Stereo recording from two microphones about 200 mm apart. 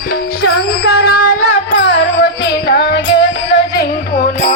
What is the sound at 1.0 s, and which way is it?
Child singing, 50° left (ahead or behind).